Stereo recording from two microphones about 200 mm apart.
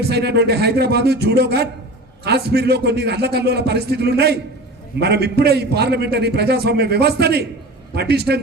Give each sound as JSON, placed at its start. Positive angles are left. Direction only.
{"t": 0.1, "sound": "a man's voice", "side_deg": -55}